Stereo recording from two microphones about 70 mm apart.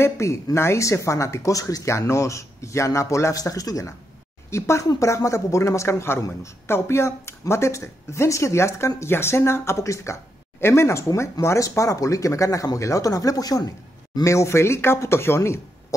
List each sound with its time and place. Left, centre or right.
0.0 s speech: left
3.3 s speech: left
4.5 s speech: left
14.2 s speech: left